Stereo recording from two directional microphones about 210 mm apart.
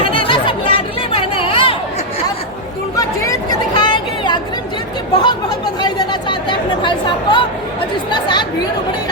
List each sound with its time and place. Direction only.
0.0 s chatter: 25° left (ahead or behind)
2.9 s chatter: 15° left (ahead or behind)